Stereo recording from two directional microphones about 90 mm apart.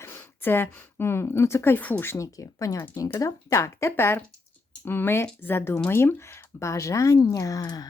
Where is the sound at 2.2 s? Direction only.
40° left (ahead or behind).